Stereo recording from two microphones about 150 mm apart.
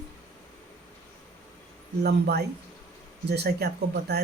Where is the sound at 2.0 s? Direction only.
90° right.